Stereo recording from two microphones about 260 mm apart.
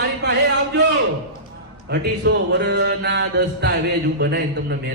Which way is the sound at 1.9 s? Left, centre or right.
Right.